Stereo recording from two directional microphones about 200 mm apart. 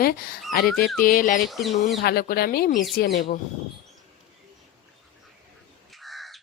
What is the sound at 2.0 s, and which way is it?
A woman's voice, 50° left (ahead or behind).